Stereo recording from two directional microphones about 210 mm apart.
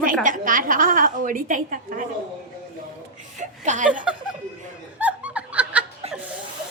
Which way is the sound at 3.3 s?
35° right (ahead or behind).